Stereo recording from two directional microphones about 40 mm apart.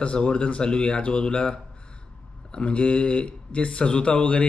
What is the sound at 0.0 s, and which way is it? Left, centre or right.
Speech, left.